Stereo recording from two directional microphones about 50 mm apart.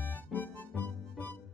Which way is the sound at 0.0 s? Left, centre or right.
Left.